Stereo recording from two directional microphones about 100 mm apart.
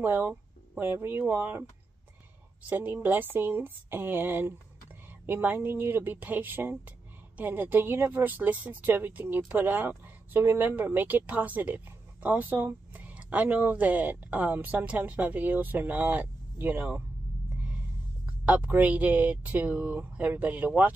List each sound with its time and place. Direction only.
0.0 s speech: 20° right (ahead or behind)
18.2 s speech: 15° right (ahead or behind)